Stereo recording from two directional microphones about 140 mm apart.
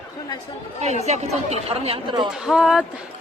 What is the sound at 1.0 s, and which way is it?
Speech, 50° right (ahead or behind).